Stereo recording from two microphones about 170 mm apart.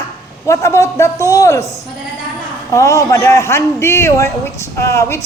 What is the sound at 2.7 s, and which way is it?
A man's voice, 20° left (ahead or behind).